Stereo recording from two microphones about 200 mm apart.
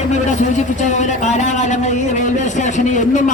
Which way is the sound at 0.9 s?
35° left (ahead or behind).